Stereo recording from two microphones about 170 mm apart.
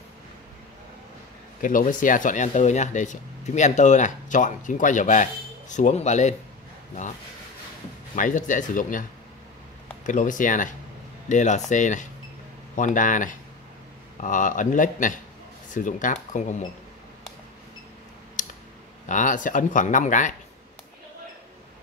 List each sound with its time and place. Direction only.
1.6 s speech: 50° left (ahead or behind)
8.2 s speech: 50° left (ahead or behind)
10.0 s speech: 50° left (ahead or behind)
18.4 s a sound: 45° left (ahead or behind)
19.0 s speech: 50° left (ahead or behind)